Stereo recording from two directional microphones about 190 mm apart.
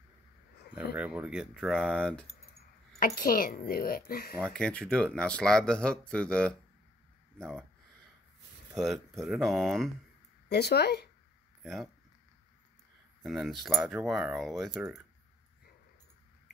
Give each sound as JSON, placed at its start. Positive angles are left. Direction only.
{"t": 0.9, "sound": "speech", "side_deg": -5}
{"t": 3.2, "sound": "speech", "side_deg": 50}
{"t": 4.4, "sound": "speech", "side_deg": 5}
{"t": 8.7, "sound": "speech", "side_deg": 0}
{"t": 10.5, "sound": "speech", "side_deg": 60}
{"t": 11.6, "sound": "speech", "side_deg": 0}
{"t": 13.2, "sound": "speech", "side_deg": 0}